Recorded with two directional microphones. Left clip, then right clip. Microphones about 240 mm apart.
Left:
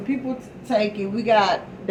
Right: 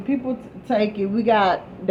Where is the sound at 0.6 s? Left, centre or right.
Right.